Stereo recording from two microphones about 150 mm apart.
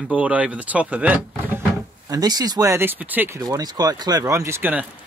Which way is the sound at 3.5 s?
25° right (ahead or behind).